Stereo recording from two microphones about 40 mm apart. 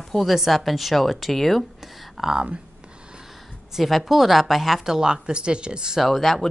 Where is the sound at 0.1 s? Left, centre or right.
Centre.